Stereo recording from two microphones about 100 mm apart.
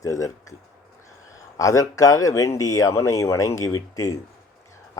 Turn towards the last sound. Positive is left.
turn(degrees=35)  # may be behind; listen again after turning